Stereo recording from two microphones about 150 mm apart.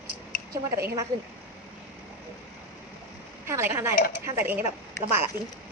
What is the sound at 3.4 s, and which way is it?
A woman's voice, 15° right (ahead or behind).